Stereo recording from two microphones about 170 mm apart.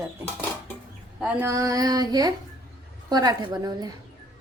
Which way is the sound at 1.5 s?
20° right (ahead or behind).